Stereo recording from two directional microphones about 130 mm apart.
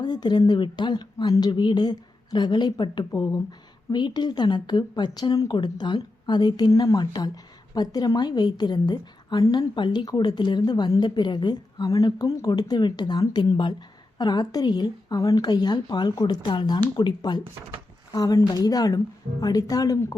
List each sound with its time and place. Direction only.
0.0 s a woman's voice: 35° left (ahead or behind)